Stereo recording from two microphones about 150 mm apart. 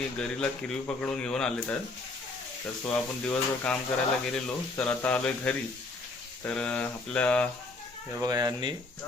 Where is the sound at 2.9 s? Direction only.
5° left (ahead or behind).